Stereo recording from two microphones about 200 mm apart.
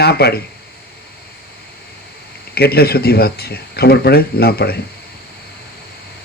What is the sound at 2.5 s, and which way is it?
Speech, 50° left (ahead or behind).